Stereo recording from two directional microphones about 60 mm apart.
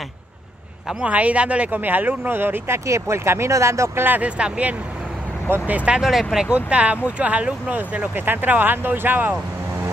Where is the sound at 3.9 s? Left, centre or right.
Right.